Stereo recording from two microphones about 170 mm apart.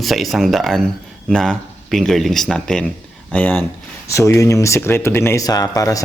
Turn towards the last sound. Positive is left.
turn(degrees=20)  # may be behind; listen again after turning